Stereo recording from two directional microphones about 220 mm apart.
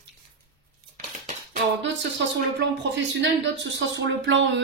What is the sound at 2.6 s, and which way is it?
Speech, 55° right (ahead or behind).